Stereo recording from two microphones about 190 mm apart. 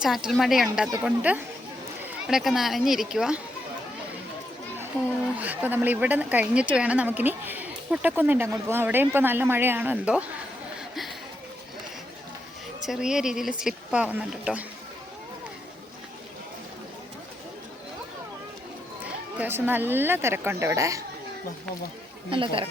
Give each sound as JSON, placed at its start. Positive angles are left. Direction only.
{"t": 0.0, "sound": "speech", "side_deg": 0}
{"t": 5.4, "sound": "speech", "side_deg": -10}
{"t": 10.8, "sound": "a sound", "side_deg": 0}
{"t": 12.8, "sound": "speech", "side_deg": -5}
{"t": 19.4, "sound": "speech", "side_deg": -10}
{"t": 22.3, "sound": "speech", "side_deg": -25}